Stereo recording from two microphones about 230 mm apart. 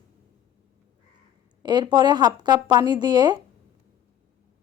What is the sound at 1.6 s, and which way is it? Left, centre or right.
Speech, centre.